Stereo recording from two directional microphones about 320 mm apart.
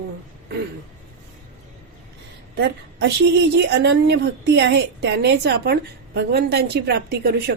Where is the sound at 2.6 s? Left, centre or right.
Right.